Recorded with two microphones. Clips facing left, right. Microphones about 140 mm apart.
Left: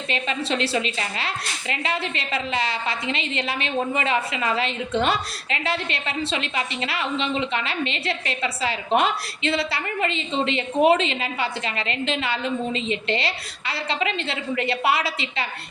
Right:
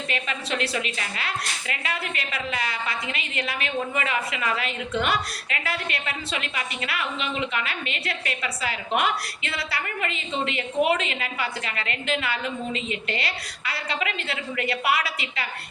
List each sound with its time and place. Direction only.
0.1 s a woman's voice: 25° left (ahead or behind)